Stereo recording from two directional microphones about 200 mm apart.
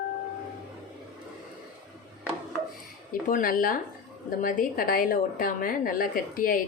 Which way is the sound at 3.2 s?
45° left (ahead or behind).